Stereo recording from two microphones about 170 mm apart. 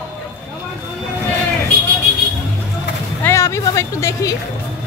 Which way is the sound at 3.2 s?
15° left (ahead or behind).